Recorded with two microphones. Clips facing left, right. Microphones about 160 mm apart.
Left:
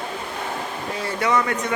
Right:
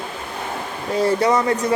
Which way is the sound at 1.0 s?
35° right (ahead or behind).